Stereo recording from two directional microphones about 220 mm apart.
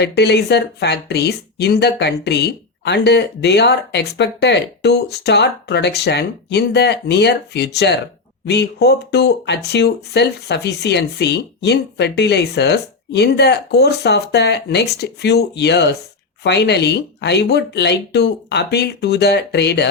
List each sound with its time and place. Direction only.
0.0 s speech: 50° left (ahead or behind)